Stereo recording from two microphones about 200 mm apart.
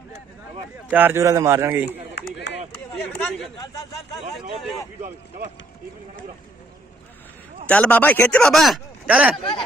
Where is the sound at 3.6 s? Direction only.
20° left (ahead or behind).